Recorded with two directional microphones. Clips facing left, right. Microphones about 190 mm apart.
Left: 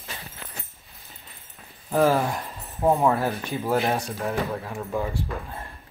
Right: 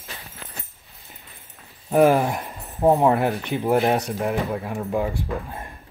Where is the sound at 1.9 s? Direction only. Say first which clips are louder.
Right 4 dB; 15° right (ahead or behind).